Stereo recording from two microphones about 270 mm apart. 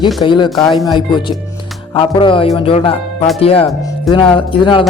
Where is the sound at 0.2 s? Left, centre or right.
Centre.